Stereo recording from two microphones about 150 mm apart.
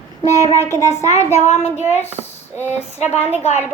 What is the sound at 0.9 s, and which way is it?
Speech, 50° left (ahead or behind).